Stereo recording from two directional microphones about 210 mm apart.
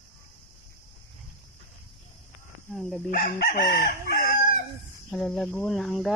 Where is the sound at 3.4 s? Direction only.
45° left (ahead or behind).